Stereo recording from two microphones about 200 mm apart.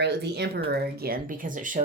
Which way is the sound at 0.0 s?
55° right (ahead or behind).